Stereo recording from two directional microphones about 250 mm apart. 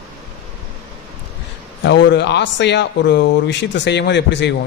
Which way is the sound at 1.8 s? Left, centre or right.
Left.